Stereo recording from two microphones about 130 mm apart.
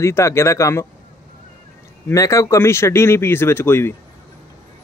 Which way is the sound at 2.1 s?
25° left (ahead or behind).